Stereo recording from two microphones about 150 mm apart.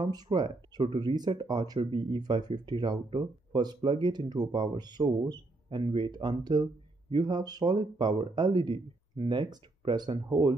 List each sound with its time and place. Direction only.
0.0 s speech: 25° right (ahead or behind)